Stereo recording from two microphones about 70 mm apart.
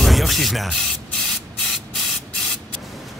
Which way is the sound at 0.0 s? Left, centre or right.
Centre.